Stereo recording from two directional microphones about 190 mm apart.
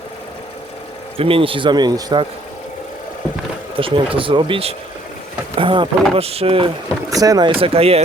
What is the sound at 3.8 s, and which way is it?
Speech, 30° right (ahead or behind).